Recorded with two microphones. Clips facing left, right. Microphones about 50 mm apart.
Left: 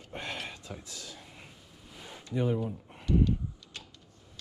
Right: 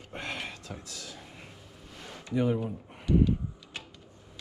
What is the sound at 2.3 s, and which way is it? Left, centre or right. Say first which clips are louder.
Speech: right 2 dB; right.